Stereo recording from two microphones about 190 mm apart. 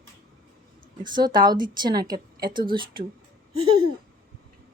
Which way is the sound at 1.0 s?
20° right (ahead or behind).